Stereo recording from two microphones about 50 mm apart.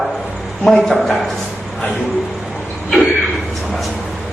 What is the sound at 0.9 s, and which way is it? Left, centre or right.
Speech, centre.